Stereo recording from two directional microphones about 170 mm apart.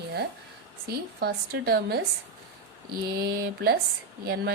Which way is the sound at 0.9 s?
65° right (ahead or behind).